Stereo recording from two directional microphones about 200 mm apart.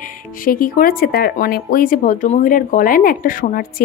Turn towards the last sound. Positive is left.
turn(degrees=45)  # may be behind; listen again after turning